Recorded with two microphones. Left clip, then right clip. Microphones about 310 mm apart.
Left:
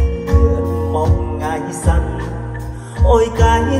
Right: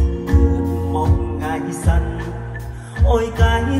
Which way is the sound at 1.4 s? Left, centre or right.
Left.